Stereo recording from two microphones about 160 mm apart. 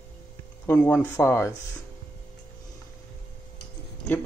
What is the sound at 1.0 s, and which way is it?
Speech, 15° left (ahead or behind).